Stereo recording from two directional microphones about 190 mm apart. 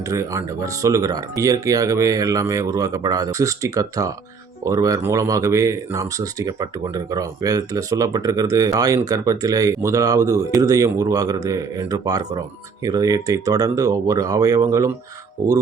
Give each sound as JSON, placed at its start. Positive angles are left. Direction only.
{"t": 0.1, "sound": "speech", "side_deg": -15}